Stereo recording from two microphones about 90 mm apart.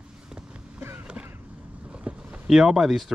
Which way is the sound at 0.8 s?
25° right (ahead or behind).